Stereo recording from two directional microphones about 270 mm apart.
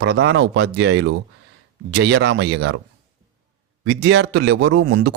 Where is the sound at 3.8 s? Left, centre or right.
Right.